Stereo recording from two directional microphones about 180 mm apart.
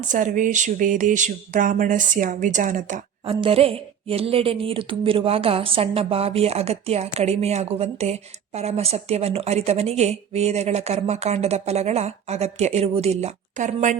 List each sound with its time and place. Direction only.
0.1 s speech: 45° right (ahead or behind)
3.2 s a woman's voice: 30° right (ahead or behind)